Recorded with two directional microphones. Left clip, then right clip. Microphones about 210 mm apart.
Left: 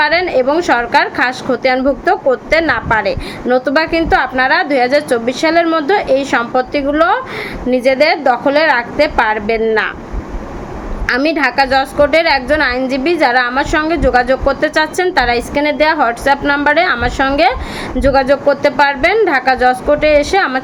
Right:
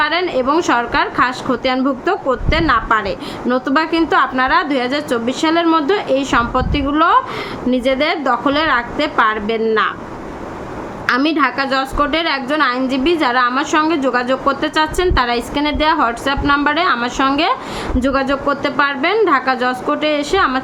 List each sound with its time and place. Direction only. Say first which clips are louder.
0.0 s a woman's voice: left 4 dB; 10° right (ahead or behind)
11.0 s a woman's voice: left 2 dB; 10° right (ahead or behind)